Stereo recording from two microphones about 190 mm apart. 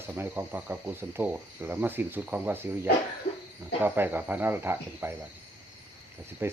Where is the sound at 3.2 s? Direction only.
65° left (ahead or behind).